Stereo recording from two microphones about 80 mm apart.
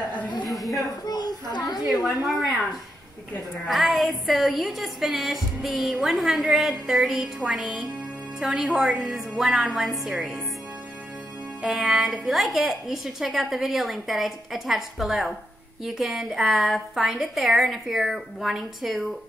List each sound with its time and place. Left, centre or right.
0.5 s a sound: centre
0.7 s a child's voice: left
1.9 s a woman's voice: centre
3.9 s a woman's voice: centre
11.6 s a woman's voice: centre